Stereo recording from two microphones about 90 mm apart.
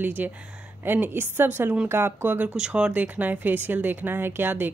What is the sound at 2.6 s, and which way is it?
Speech, 10° right (ahead or behind).